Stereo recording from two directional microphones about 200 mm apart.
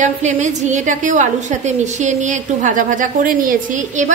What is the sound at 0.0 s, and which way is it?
A woman's voice, 35° right (ahead or behind).